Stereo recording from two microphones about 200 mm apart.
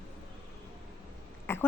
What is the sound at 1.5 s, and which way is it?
Speech, 10° left (ahead or behind).